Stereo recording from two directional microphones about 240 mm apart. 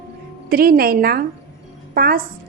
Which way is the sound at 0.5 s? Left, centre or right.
Right.